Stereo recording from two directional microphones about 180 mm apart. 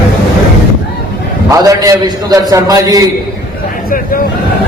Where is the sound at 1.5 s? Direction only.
20° right (ahead or behind).